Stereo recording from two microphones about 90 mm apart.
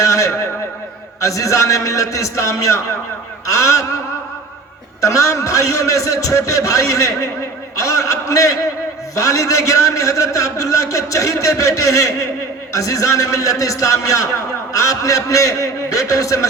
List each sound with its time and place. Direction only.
0.0 s a sound: 35° left (ahead or behind)
1.2 s a man's voice: 35° left (ahead or behind)
4.9 s a man's voice: 40° left (ahead or behind)